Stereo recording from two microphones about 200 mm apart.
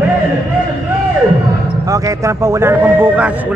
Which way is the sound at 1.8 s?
15° right (ahead or behind).